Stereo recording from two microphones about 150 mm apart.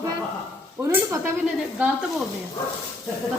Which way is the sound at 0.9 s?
15° right (ahead or behind).